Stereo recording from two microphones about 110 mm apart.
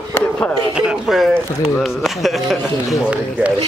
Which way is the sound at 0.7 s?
5° right (ahead or behind).